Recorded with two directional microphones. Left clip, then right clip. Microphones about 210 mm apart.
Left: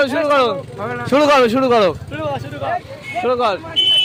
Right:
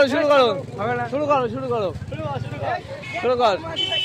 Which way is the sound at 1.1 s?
50° left (ahead or behind).